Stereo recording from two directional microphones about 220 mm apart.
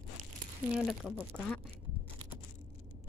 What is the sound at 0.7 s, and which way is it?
Speech, 5° right (ahead or behind).